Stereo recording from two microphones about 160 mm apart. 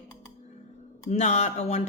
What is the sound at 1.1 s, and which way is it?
Speech, 45° left (ahead or behind).